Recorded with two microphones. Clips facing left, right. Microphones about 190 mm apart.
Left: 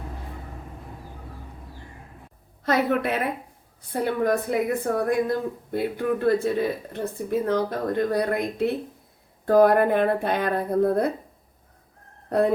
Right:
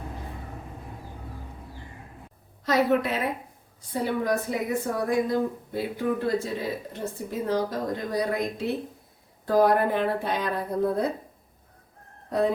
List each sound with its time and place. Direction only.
2.6 s speech: 55° left (ahead or behind)
12.3 s speech: 55° left (ahead or behind)